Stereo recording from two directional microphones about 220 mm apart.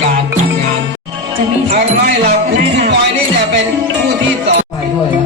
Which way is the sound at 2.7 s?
50° right (ahead or behind).